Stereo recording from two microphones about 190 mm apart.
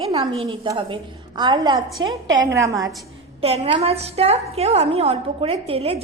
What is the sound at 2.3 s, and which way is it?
Speech, 20° right (ahead or behind).